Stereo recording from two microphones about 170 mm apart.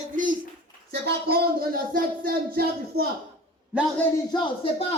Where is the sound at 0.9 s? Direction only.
65° right (ahead or behind).